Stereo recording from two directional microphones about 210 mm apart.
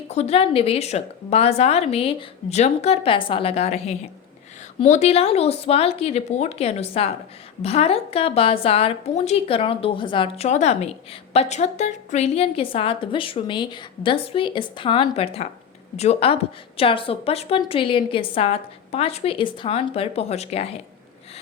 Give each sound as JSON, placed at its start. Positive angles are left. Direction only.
{"t": 0.1, "sound": "a woman's voice", "side_deg": 30}